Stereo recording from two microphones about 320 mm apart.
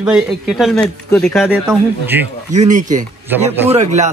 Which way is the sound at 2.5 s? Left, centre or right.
Right.